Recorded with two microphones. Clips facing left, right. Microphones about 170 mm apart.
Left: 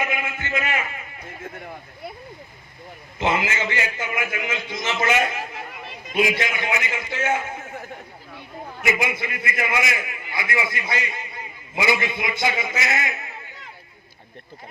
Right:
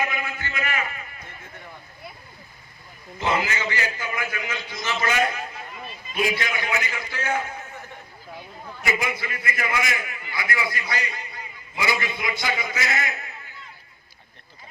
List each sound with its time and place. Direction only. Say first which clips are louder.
0.0 s a sound: left 1 dB; 20° left (ahead or behind)
3.2 s a man's voice: left 2 dB; 20° left (ahead or behind)
6.4 s a man's voice: left 2 dB; 20° left (ahead or behind)
8.8 s a man's voice: left 3 dB; 20° left (ahead or behind)